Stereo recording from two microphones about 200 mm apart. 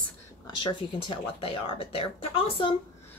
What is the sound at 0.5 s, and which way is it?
Speech, 25° left (ahead or behind).